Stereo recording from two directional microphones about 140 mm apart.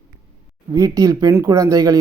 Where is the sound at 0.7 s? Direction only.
25° right (ahead or behind).